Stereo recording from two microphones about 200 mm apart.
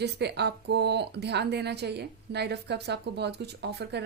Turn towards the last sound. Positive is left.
turn(degrees=-55)  # may be behind; listen again after turning